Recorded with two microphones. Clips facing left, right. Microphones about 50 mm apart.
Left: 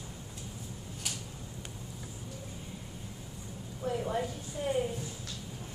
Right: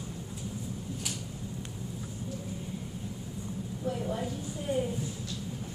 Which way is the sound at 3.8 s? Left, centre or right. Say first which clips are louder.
Left 1 dB; left.